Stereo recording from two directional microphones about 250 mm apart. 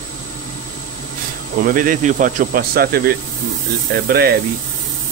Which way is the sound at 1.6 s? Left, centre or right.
Right.